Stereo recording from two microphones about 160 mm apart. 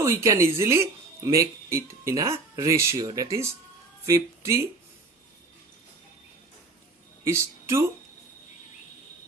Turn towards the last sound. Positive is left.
turn(degrees=-15)  # may be behind; listen again after turning